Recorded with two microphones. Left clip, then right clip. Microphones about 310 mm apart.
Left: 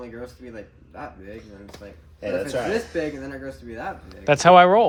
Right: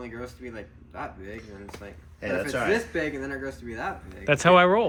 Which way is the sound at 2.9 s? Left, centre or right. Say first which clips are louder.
Left 1 dB; centre.